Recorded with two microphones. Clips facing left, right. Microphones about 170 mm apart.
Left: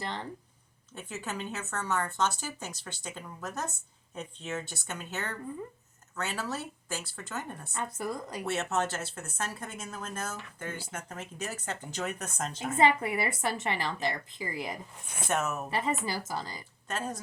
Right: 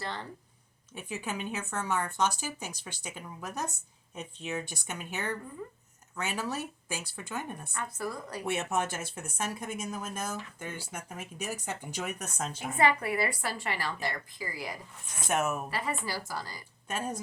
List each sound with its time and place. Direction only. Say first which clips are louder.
0.0 s a woman's voice: left 1 dB; 20° left (ahead or behind)
0.9 s speech: right 1 dB; 10° right (ahead or behind)
7.7 s a woman's voice: left 3 dB; 20° left (ahead or behind)
8.4 s speech: even; 15° right (ahead or behind)
12.7 s a woman's voice: left 2 dB; 20° left (ahead or behind)
15.3 s speech: right 1 dB; 10° right (ahead or behind)
15.7 s a woman's voice: left 3 dB; 20° left (ahead or behind)